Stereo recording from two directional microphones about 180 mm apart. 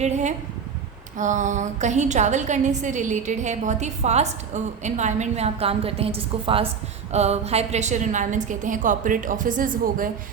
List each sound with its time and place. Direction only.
0.0 s a woman's voice: 40° right (ahead or behind)